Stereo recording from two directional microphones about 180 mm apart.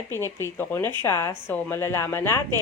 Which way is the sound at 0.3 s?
10° left (ahead or behind).